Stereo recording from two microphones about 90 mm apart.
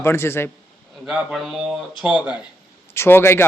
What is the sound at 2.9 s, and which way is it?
Speech, 25° left (ahead or behind).